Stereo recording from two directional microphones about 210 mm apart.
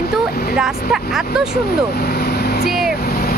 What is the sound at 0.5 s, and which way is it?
Speech, centre (ahead or behind).